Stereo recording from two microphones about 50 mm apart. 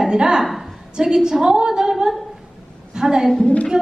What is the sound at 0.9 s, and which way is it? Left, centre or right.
A woman's voice, centre.